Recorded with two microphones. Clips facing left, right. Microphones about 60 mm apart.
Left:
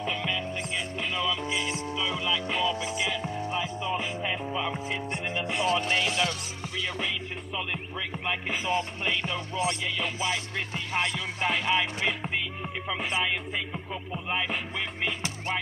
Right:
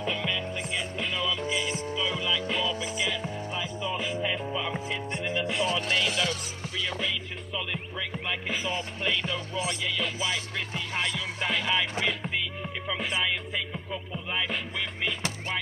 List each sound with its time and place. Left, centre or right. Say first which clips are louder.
0.0 s music: even; centre
3.9 s music: right 2 dB; left
8.3 s music: left 3 dB; centre